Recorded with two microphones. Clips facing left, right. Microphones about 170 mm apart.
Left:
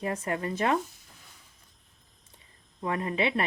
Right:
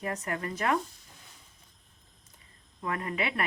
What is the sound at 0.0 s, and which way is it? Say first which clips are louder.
Speech: left 3 dB; 25° left (ahead or behind).